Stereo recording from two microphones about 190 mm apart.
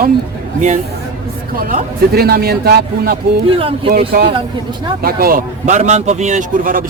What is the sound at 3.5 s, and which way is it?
Speech, 30° right (ahead or behind).